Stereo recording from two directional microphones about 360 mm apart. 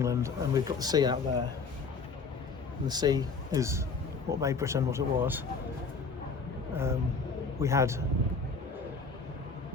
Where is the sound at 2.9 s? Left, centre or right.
Centre.